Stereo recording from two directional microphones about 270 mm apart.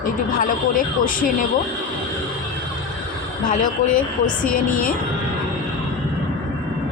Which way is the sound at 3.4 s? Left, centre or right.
Left.